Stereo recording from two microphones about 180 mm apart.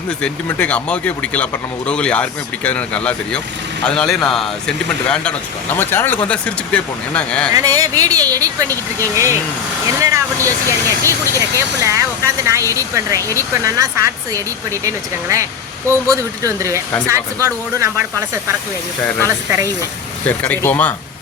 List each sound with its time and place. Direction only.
0.2 s speech: 5° left (ahead or behind)
7.5 s speech: 20° right (ahead or behind)
20.2 s speech: 10° left (ahead or behind)